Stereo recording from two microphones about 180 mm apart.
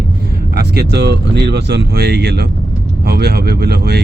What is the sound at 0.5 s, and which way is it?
Speech, 60° right (ahead or behind).